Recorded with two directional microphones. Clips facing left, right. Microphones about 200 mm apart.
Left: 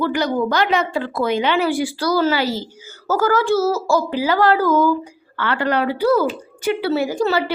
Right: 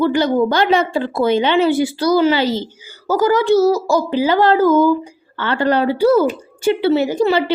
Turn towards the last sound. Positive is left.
turn(degrees=-20)  # may be behind; listen again after turning